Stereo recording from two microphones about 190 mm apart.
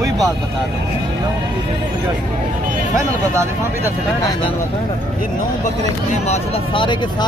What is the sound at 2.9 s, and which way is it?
Speech, 15° right (ahead or behind).